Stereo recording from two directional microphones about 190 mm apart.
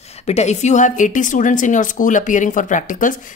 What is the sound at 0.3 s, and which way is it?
A woman's voice, 35° left (ahead or behind).